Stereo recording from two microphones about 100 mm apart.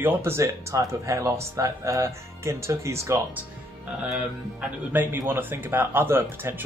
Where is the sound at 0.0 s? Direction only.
25° right (ahead or behind).